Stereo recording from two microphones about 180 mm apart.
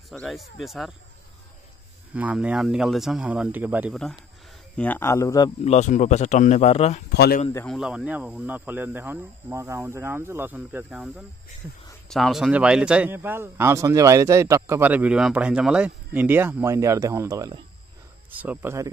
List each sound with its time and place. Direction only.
0.1 s speech: centre (ahead or behind)
2.1 s speech: 10° right (ahead or behind)
4.7 s speech: 10° left (ahead or behind)
5.6 s speech: 40° left (ahead or behind)
7.1 s speech: 60° left (ahead or behind)
7.6 s a man's voice: 5° right (ahead or behind)
12.1 s a man's voice: centre (ahead or behind); by 17.6 s 20° right (ahead or behind)
18.3 s a man's voice: 10° right (ahead or behind)